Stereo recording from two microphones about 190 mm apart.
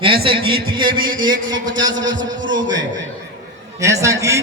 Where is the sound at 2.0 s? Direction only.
80° right.